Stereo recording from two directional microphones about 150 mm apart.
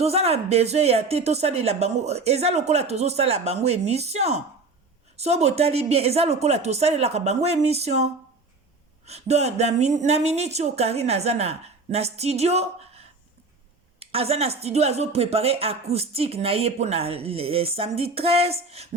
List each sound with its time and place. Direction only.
0.0 s speech: 45° right (ahead or behind)